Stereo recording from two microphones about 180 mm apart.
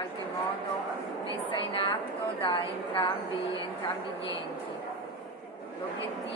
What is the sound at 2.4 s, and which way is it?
Speech, 30° left (ahead or behind).